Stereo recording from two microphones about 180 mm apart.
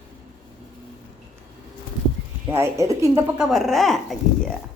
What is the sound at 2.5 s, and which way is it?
Speech, 15° right (ahead or behind).